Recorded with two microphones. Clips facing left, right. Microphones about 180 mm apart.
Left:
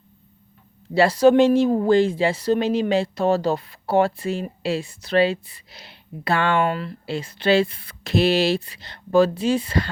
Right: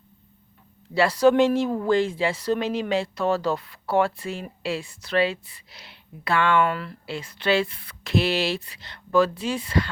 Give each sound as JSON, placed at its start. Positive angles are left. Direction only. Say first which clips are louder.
{"t": 1.2, "sound": "speech", "louder": "left 3 dB", "side_deg": 30}